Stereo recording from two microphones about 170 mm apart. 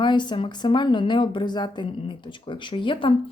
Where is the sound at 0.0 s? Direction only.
25° left (ahead or behind).